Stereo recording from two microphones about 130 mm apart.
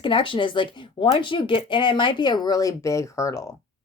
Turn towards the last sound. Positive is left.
turn(degrees=25)  # may be behind; listen again after turning